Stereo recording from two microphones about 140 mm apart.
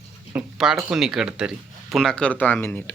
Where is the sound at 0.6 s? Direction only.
5° right (ahead or behind).